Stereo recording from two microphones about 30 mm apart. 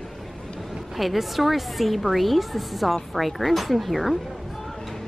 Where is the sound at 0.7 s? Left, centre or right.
Centre.